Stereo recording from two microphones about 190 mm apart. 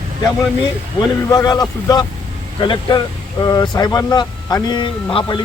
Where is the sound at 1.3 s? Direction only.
20° left (ahead or behind).